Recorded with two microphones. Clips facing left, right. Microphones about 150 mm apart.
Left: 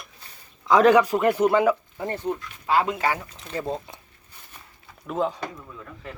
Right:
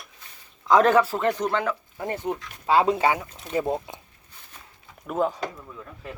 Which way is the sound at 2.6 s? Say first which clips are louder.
Right 3 dB; 25° right (ahead or behind).